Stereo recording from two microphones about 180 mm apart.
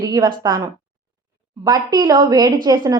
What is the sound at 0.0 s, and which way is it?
A woman's voice, 20° right (ahead or behind).